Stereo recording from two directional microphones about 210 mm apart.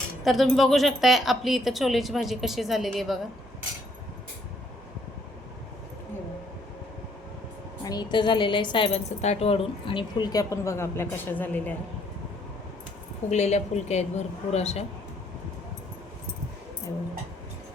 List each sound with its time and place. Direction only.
0.3 s a woman's voice: centre (ahead or behind)
7.9 s a woman's voice: 20° left (ahead or behind)
13.3 s a woman's voice: 30° left (ahead or behind)